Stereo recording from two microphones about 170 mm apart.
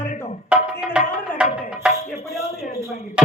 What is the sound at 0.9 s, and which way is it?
Music, 5° right (ahead or behind).